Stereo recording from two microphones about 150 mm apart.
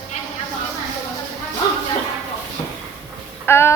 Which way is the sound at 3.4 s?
15° left (ahead or behind).